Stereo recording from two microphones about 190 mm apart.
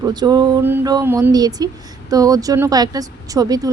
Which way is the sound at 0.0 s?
20° right (ahead or behind).